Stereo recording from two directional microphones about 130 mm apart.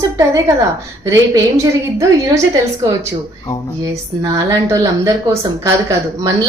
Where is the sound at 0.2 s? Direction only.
25° right (ahead or behind).